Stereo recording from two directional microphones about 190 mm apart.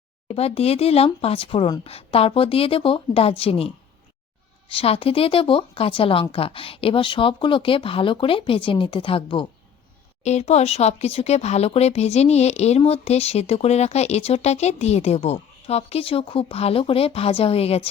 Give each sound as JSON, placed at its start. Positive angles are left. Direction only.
{"t": 0.3, "sound": "speech", "side_deg": 30}
{"t": 4.7, "sound": "speech", "side_deg": 30}